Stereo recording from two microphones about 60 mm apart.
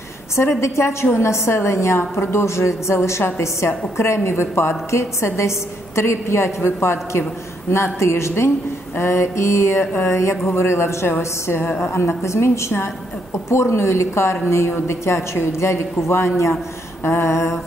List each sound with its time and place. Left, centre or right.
0.4 s a woman's voice: left